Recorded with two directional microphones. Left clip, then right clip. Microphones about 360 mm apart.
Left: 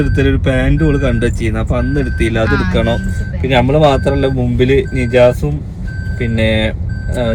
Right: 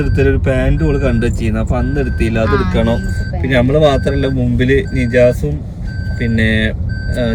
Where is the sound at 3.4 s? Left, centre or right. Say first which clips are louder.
Left 1 dB; left.